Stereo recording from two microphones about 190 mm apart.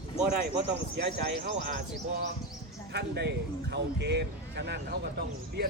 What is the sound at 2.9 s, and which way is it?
A man's voice, 60° right (ahead or behind).